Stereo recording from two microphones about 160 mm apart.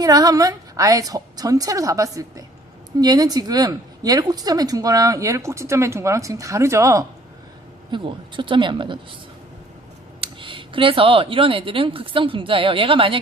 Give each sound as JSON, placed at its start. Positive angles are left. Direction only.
{"t": 0.0, "sound": "speech", "side_deg": -25}
{"t": 7.9, "sound": "speech", "side_deg": -30}
{"t": 10.2, "sound": "speech", "side_deg": -30}